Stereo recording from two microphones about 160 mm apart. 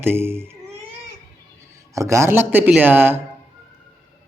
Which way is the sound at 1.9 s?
20° right (ahead or behind).